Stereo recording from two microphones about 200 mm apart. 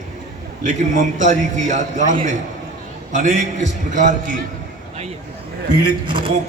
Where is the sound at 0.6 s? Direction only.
40° right (ahead or behind).